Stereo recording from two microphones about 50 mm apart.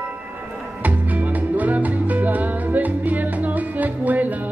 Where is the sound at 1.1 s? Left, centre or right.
Right.